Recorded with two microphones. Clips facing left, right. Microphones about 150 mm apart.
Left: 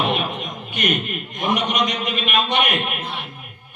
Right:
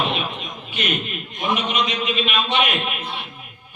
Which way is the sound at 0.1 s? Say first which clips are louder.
Left 3 dB; 50° left (ahead or behind).